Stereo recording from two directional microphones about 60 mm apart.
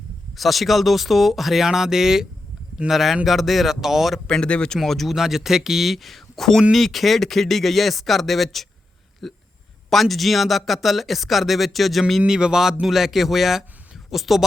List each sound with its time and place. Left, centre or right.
0.3 s speech: centre
4.3 s speech: centre
4.8 s speech: centre
9.2 s hiccup: centre
9.9 s speech: centre
12.2 s speech: centre